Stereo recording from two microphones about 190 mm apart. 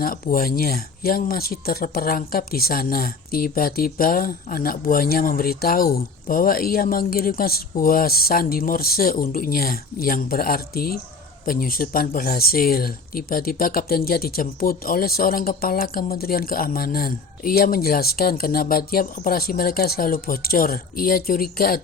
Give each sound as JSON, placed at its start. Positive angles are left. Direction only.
{"t": 0.0, "sound": "speech", "side_deg": 50}